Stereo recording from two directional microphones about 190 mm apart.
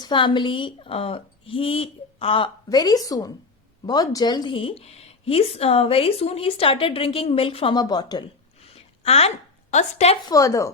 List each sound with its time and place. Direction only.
0.0 s a woman's voice: 25° left (ahead or behind)
8.6 s a sound: 30° left (ahead or behind)
9.7 s a woman's voice: 35° left (ahead or behind)
10.2 s speech: 15° left (ahead or behind)